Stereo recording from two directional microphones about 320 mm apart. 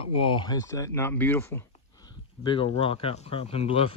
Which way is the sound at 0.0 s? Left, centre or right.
Centre.